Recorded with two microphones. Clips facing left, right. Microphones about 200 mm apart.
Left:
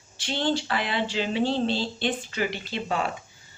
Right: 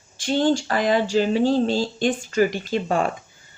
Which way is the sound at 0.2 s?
45° right (ahead or behind).